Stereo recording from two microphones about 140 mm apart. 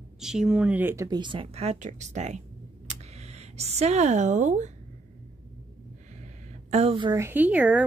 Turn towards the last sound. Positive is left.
turn(degrees=-10)  # may be behind; listen again after turning